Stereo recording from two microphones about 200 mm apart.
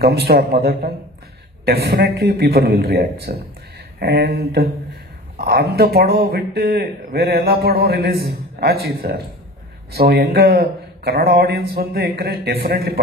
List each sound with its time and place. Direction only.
0.0 s speech: 50° right (ahead or behind)